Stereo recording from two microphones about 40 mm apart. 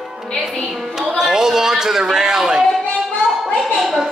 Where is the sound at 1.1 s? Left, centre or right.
Centre.